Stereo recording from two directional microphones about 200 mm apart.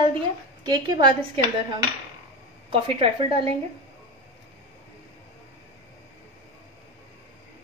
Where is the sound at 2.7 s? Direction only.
25° right (ahead or behind).